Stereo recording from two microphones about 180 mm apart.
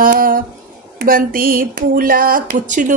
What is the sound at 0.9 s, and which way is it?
Speech, 55° right (ahead or behind).